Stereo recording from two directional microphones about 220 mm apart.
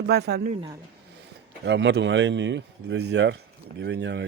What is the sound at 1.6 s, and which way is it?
Speech, 55° right (ahead or behind).